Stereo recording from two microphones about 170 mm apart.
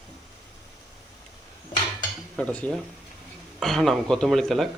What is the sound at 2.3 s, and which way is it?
Cutlery, 5° left (ahead or behind).